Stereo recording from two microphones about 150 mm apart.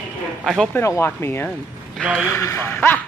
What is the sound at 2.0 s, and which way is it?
Speech, 5° right (ahead or behind).